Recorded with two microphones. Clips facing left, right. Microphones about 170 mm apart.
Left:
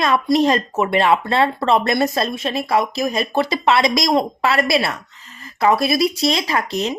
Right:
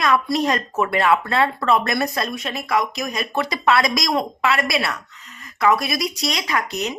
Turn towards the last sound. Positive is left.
turn(degrees=30)  # may be behind; listen again after turning